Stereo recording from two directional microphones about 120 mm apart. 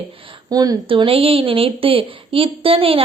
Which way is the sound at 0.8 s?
50° right (ahead or behind).